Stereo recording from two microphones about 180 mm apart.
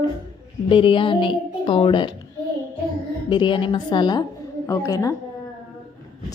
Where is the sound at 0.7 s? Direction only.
30° left (ahead or behind).